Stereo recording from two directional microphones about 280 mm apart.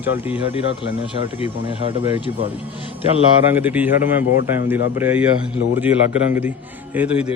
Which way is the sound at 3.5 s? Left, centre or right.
Centre.